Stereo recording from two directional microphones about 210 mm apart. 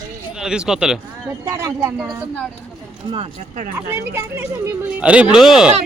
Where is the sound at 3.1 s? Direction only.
30° right (ahead or behind).